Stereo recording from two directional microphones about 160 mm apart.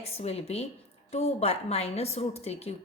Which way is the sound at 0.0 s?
40° left (ahead or behind).